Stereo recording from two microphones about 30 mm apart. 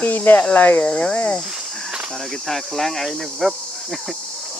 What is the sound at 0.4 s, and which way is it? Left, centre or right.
Speech, left.